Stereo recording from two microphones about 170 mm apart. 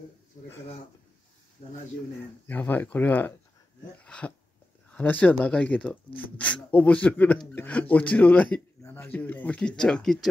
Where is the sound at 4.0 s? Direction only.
5° left (ahead or behind).